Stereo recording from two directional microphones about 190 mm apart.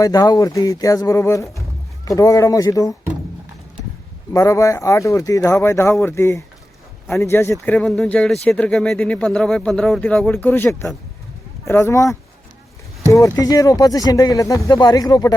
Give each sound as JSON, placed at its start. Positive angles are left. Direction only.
{"t": 0.0, "sound": "speech", "side_deg": 20}
{"t": 4.3, "sound": "speech", "side_deg": 15}